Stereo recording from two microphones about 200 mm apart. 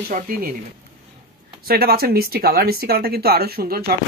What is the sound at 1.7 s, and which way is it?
Speech, 50° right (ahead or behind).